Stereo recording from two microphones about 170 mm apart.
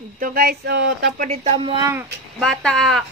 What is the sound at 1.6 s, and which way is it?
Speech, 30° right (ahead or behind).